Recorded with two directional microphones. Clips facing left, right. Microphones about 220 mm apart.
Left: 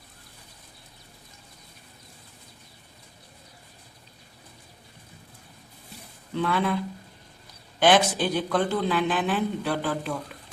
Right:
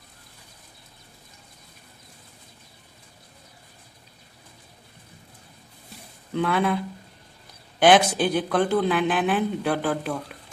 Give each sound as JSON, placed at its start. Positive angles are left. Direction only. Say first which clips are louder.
{"t": 6.3, "sound": "speech", "louder": "right 2 dB", "side_deg": -55}
{"t": 7.8, "sound": "speech", "louder": "right 3 dB", "side_deg": -50}